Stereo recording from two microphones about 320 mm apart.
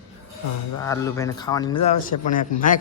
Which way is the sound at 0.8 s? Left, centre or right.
Centre.